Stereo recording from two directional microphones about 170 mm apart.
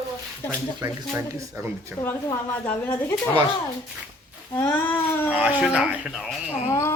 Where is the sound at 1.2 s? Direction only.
15° right (ahead or behind).